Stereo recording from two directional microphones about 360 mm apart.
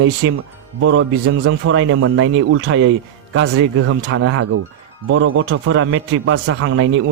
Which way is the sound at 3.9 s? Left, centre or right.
Right.